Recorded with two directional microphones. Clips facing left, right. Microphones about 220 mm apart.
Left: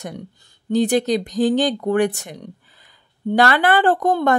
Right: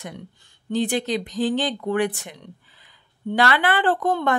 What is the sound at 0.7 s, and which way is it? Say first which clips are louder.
Speech: left 6 dB; 40° left (ahead or behind).